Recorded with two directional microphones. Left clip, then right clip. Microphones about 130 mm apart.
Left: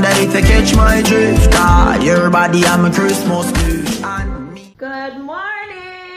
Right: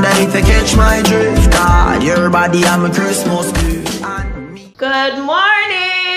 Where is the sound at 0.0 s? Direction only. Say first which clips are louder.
Right 1 dB; centre (ahead or behind).